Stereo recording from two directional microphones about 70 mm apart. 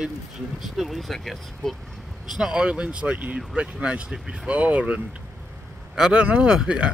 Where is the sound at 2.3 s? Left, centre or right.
Centre.